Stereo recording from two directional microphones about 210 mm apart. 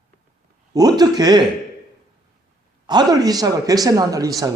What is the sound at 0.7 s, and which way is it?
Speech, 20° right (ahead or behind).